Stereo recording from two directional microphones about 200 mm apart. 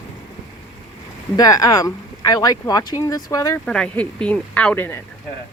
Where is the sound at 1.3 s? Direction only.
15° left (ahead or behind).